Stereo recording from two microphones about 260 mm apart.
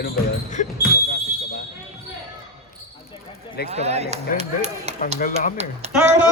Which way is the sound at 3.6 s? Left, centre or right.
Right.